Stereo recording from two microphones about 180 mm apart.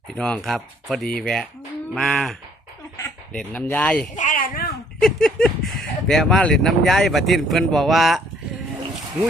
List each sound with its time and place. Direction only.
0.2 s speech: 5° left (ahead or behind)
3.3 s speech: 10° left (ahead or behind)
4.2 s a sound: 50° left (ahead or behind)
5.0 s speech: centre (ahead or behind)